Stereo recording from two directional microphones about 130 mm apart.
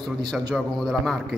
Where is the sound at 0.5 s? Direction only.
5° left (ahead or behind).